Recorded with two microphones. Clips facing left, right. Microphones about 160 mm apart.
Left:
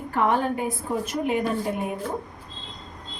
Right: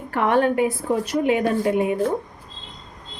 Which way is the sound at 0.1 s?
70° right (ahead or behind).